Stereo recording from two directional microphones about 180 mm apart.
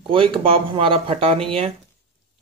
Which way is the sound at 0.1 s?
30° right (ahead or behind).